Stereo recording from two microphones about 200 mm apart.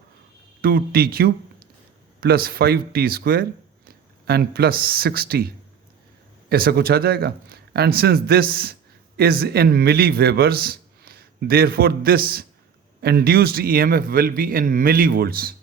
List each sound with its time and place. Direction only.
0.6 s a man's voice: 50° right (ahead or behind)
6.5 s a man's voice: 50° right (ahead or behind)